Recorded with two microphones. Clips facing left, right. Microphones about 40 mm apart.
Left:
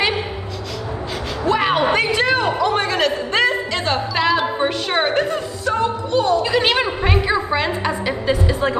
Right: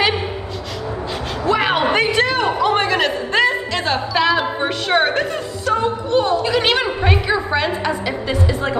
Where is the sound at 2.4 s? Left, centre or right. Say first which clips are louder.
Right 2 dB; right.